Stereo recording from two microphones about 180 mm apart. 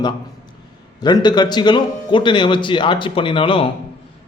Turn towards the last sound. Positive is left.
turn(degrees=30)  # may be behind; listen again after turning